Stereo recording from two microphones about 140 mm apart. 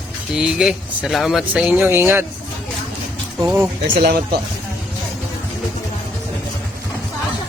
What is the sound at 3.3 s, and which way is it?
Speech, 20° right (ahead or behind).